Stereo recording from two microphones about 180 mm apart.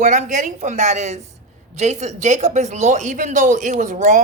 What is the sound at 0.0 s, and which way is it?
Speech, 45° right (ahead or behind).